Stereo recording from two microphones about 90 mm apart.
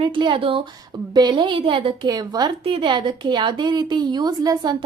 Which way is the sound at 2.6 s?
80° right.